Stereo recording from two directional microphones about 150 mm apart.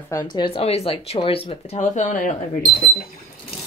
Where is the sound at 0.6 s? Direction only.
40° left (ahead or behind).